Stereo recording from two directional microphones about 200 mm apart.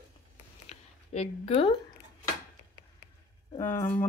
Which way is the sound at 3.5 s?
10° left (ahead or behind).